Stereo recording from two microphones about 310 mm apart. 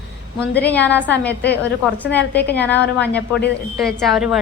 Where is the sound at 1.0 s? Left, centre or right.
Left.